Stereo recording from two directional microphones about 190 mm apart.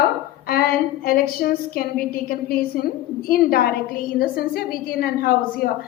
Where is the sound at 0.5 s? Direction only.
50° left (ahead or behind).